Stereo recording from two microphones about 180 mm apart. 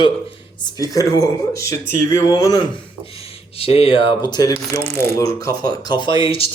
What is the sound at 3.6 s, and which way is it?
Speech, 30° left (ahead or behind).